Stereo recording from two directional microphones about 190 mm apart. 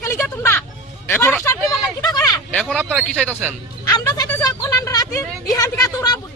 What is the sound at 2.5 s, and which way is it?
A man's voice, 5° left (ahead or behind).